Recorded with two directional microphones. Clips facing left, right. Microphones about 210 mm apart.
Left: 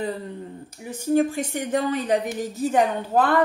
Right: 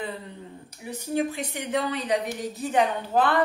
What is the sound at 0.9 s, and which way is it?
Speech, 45° left (ahead or behind).